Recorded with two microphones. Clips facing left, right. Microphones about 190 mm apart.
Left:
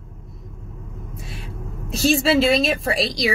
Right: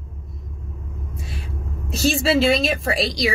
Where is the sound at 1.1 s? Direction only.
Centre (ahead or behind).